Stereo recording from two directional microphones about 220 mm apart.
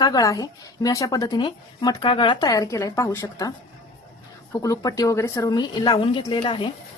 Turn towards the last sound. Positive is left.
turn(degrees=20)  # may be behind; listen again after turning